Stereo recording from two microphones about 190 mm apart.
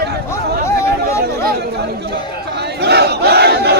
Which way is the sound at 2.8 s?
60° right (ahead or behind).